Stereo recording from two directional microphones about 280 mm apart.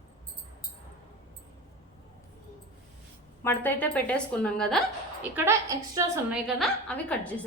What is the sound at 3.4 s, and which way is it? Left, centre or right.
A woman's voice, centre.